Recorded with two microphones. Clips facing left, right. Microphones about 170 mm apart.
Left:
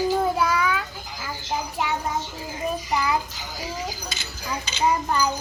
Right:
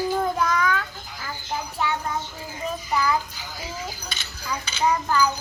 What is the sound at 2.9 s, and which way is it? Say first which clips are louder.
Child singing: right 1 dB; 20° left (ahead or behind).